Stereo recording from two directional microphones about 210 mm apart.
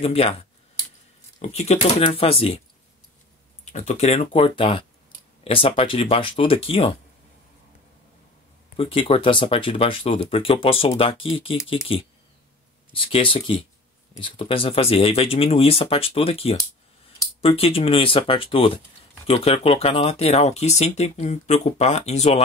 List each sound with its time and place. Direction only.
0.0 s speech: 25° left (ahead or behind)
3.6 s speech: 35° left (ahead or behind)
8.7 s speech: 25° left (ahead or behind)